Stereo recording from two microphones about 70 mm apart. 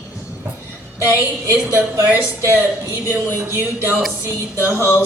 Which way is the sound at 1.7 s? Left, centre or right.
Right.